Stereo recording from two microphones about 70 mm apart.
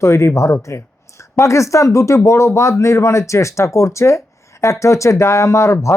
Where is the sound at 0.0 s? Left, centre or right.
Left.